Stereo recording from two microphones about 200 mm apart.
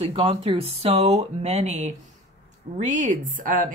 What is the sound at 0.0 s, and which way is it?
Speech, 30° right (ahead or behind).